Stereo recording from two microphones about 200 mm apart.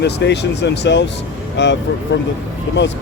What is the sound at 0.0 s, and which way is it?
Speech, 60° left (ahead or behind).